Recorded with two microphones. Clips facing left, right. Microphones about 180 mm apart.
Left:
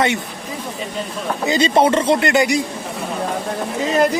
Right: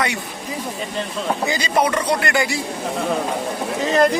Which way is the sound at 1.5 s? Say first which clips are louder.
Left 7 dB; 25° left (ahead or behind).